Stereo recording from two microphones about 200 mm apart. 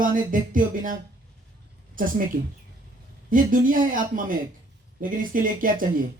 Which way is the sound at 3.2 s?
40° right (ahead or behind).